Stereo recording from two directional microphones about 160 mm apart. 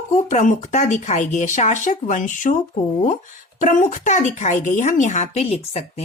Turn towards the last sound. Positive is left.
turn(degrees=40)  # may be behind; listen again after turning